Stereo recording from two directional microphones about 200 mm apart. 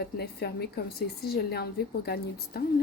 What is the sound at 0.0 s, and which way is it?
Speech, 55° left (ahead or behind).